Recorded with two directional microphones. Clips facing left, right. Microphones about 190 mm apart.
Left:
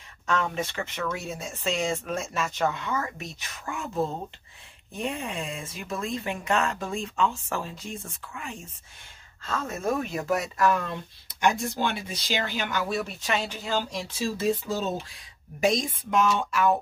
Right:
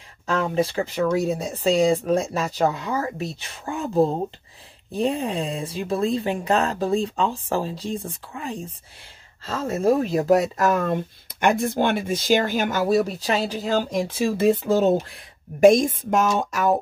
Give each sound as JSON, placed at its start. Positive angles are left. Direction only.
{"t": 0.3, "sound": "speech", "side_deg": -35}
{"t": 11.4, "sound": "speech", "side_deg": -55}